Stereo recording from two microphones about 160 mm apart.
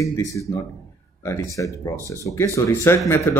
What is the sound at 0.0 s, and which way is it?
Speech, 20° left (ahead or behind).